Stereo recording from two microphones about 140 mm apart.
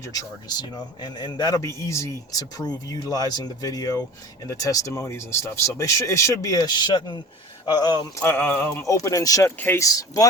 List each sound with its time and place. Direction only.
0.1 s speech: 25° left (ahead or behind)
8.2 s speech: 15° left (ahead or behind)